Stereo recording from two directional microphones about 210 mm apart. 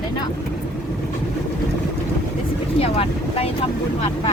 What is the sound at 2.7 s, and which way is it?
Vehicle, 30° left (ahead or behind).